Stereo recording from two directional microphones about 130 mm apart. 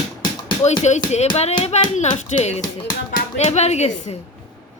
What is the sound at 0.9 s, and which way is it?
Speech, 65° left (ahead or behind).